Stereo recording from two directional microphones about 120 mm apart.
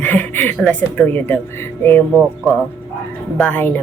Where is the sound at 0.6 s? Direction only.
15° left (ahead or behind).